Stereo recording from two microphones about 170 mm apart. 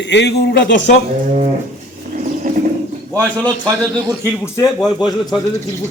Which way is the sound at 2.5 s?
50° right (ahead or behind).